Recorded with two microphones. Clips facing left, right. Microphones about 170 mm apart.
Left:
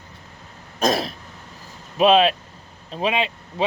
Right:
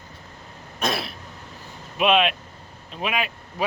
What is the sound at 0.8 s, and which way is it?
Throat clearing, 40° left (ahead or behind).